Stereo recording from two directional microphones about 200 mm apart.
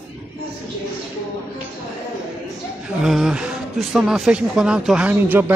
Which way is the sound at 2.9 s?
5° right (ahead or behind).